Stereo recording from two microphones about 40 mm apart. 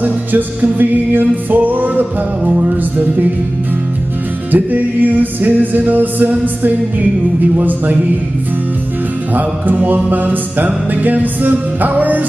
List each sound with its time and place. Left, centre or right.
0.0 s music: right
2.4 s music: right
4.5 s music: right
9.3 s music: right